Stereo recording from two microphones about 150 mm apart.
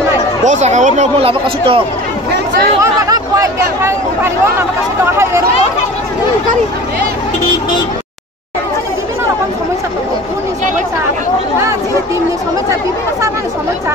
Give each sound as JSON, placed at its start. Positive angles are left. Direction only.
{"t": 0.5, "sound": "speech", "side_deg": -50}
{"t": 2.8, "sound": "speech", "side_deg": -20}